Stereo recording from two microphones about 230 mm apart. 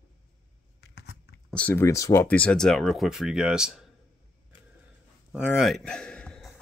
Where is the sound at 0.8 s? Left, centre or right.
Left.